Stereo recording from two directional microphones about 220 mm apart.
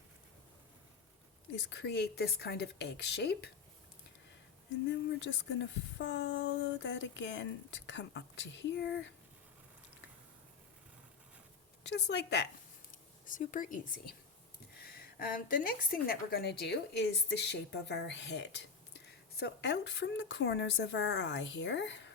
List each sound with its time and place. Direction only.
1.7 s a woman's voice: 50° left (ahead or behind)
4.9 s speech: 55° left (ahead or behind)
11.8 s a woman's voice: 50° left (ahead or behind)
12.9 s a woman's voice: 35° left (ahead or behind); by 22.1 s 55° left (ahead or behind)